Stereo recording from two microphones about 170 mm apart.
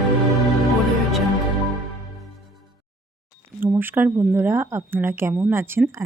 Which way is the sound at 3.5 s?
15° right (ahead or behind).